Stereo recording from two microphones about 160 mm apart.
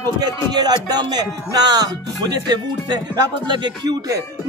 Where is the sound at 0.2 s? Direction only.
25° right (ahead or behind).